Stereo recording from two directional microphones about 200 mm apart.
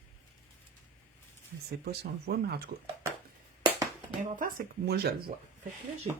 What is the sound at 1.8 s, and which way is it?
Speech, 50° right (ahead or behind).